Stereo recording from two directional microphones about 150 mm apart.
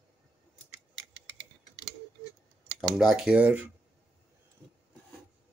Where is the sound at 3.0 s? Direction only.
Centre (ahead or behind).